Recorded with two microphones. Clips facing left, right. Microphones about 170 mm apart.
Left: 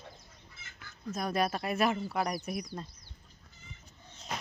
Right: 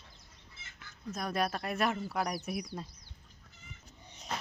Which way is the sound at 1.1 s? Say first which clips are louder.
Left 2 dB; centre (ahead or behind).